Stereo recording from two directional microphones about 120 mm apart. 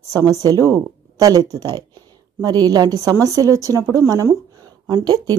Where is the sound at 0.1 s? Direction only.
30° right (ahead or behind).